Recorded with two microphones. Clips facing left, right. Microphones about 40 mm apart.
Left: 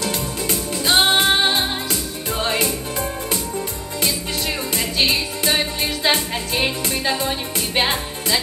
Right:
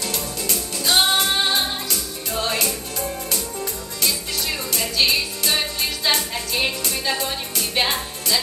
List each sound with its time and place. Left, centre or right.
0.0 s music: left